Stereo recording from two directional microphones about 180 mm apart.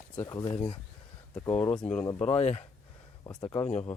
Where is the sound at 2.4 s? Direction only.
35° left (ahead or behind).